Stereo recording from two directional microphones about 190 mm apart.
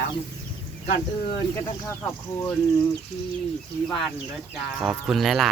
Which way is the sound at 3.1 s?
35° left (ahead or behind).